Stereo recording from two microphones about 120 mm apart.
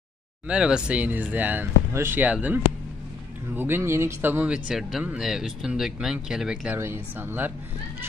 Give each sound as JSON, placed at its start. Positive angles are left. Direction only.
{"t": 0.5, "sound": "speech", "side_deg": -5}
{"t": 6.8, "sound": "speech", "side_deg": -20}